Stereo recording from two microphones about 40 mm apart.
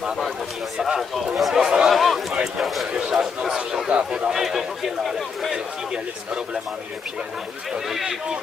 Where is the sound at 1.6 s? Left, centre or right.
Right.